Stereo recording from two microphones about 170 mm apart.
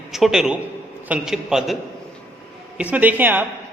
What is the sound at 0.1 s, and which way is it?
Speech, centre (ahead or behind).